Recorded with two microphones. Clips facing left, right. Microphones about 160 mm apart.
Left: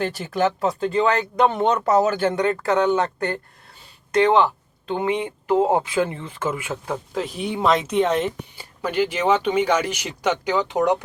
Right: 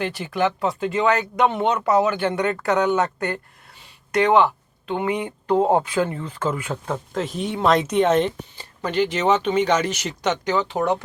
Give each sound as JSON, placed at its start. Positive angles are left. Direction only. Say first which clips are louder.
{"t": 0.0, "sound": "speech", "louder": "left 1 dB", "side_deg": 45}
{"t": 2.4, "sound": "speech", "louder": "even", "side_deg": 30}
{"t": 4.9, "sound": "speech", "louder": "left 1 dB", "side_deg": 25}
{"t": 7.1, "sound": "speech", "louder": "even", "side_deg": 0}